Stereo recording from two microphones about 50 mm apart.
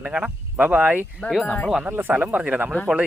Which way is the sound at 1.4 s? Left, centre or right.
Left.